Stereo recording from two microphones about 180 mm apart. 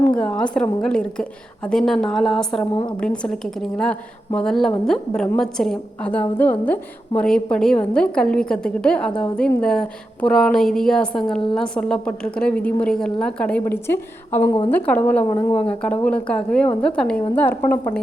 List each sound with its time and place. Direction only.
0.2 s a woman's voice: 5° left (ahead or behind)